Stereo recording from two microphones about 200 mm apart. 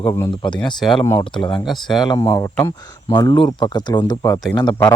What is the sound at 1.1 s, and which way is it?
Speech, 25° left (ahead or behind).